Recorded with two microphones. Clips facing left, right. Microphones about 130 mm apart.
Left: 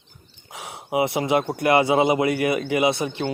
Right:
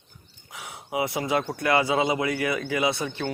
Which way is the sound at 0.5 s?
25° left (ahead or behind).